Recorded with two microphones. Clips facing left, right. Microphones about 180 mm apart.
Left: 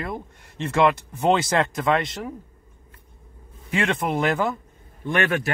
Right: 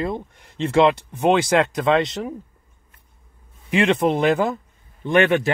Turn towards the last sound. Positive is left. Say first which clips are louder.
# right 6 dB
turn(degrees=-20)  # may be behind; listen again after turning